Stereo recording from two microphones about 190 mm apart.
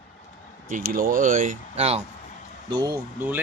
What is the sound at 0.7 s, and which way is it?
Speech, 50° right (ahead or behind).